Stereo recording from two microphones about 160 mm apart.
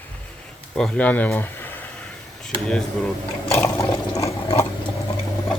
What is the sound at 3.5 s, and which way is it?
Water, 15° left (ahead or behind).